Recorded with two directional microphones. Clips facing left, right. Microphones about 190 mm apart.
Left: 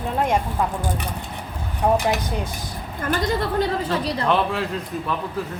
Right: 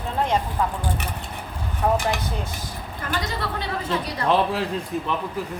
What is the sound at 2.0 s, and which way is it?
Speech, 20° left (ahead or behind).